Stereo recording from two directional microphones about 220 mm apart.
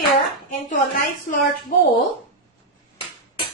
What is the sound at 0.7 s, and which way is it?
Speech, 40° left (ahead or behind).